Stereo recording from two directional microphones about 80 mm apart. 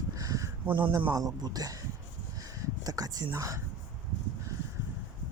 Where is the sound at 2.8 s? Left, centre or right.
Right.